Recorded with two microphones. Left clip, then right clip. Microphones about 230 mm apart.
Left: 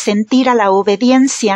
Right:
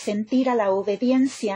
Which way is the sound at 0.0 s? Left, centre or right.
Left.